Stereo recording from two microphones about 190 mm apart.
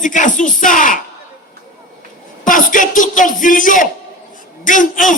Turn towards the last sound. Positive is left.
turn(degrees=45)  # may be behind; listen again after turning